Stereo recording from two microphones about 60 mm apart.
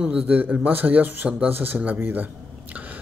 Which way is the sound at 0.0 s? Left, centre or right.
Right.